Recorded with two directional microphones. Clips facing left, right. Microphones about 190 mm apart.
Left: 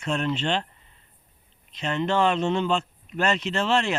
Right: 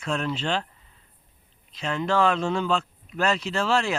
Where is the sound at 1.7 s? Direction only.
Centre (ahead or behind).